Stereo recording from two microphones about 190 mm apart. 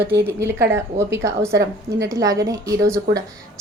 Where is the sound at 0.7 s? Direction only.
15° right (ahead or behind).